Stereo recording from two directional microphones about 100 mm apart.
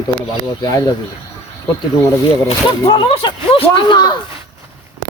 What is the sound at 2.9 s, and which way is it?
Speech, 50° left (ahead or behind).